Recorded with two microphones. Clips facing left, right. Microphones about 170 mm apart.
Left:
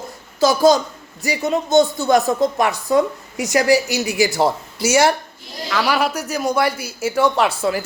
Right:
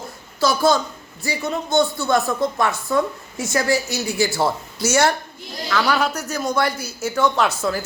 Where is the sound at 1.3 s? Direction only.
20° left (ahead or behind).